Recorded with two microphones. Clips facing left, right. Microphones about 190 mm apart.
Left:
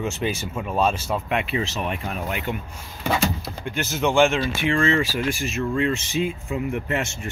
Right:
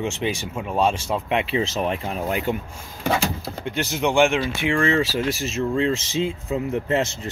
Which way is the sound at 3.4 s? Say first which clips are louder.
Right 2 dB; 20° right (ahead or behind).